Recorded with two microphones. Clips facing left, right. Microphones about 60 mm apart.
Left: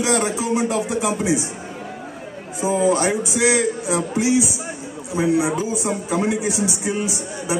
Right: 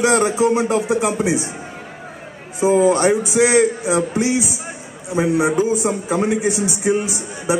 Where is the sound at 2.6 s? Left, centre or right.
Right.